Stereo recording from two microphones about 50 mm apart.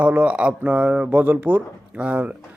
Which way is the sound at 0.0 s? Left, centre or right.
Right.